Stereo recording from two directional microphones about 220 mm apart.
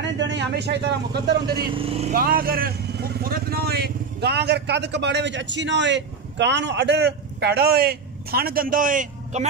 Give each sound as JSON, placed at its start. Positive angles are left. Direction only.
{"t": 0.0, "sound": "speech", "side_deg": -55}
{"t": 1.8, "sound": "speech", "side_deg": -25}
{"t": 2.1, "sound": "speech", "side_deg": -40}